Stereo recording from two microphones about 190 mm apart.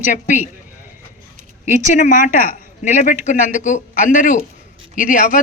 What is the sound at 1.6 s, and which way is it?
A man's voice, 40° left (ahead or behind).